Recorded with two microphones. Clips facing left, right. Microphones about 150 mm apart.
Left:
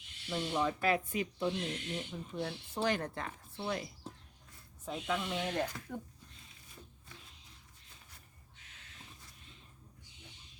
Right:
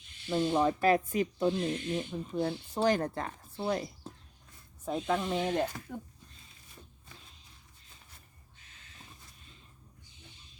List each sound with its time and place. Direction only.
0.3 s speech: 35° right (ahead or behind)
4.9 s speech: 40° right (ahead or behind)
5.9 s speech: 10° right (ahead or behind)